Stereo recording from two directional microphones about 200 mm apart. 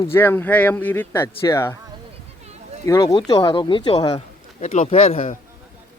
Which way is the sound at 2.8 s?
15° left (ahead or behind).